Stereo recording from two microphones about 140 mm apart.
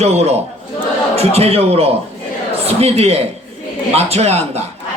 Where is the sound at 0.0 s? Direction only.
50° right (ahead or behind).